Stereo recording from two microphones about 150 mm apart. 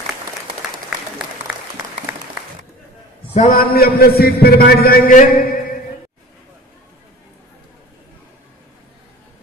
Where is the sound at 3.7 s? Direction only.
90° left; by 5.4 s 65° left (ahead or behind).